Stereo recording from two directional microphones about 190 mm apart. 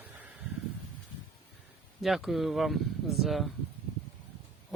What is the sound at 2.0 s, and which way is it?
Speech, centre (ahead or behind).